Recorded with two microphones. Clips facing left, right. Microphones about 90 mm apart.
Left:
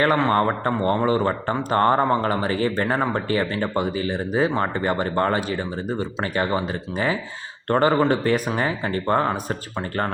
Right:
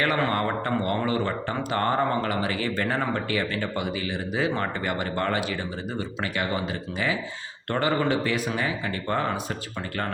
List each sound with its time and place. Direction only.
0.2 s speech: 30° left (ahead or behind)